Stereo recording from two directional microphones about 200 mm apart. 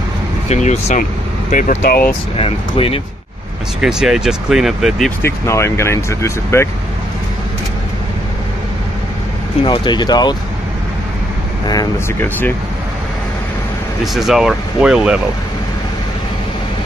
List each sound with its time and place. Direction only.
0.5 s speech: 35° left (ahead or behind)
2.3 s speech: 30° left (ahead or behind)
3.8 s speech: centre (ahead or behind)
5.2 s speech: 15° left (ahead or behind)
9.7 s speech: 20° left (ahead or behind)
11.6 s speech: 20° left (ahead or behind)
14.0 s speech: centre (ahead or behind)